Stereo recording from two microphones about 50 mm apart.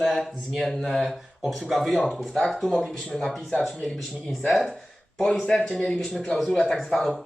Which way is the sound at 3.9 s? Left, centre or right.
Centre.